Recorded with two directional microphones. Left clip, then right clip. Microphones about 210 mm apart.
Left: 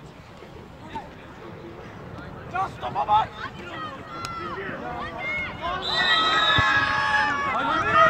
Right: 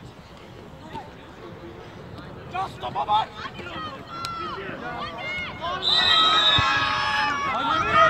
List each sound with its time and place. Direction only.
2.5 s speech: 10° right (ahead or behind)
3.6 s run: 45° right (ahead or behind)
5.0 s a sound: 45° right (ahead or behind)
7.6 s run: 40° right (ahead or behind)